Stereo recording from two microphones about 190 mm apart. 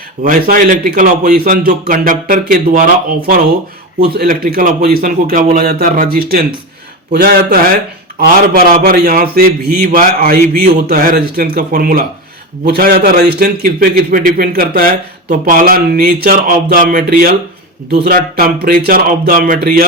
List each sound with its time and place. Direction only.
0.2 s a man's voice: 50° right (ahead or behind)
4.2 s a man's voice: 50° right (ahead or behind)